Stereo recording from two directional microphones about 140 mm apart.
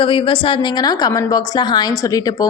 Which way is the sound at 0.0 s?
40° left (ahead or behind).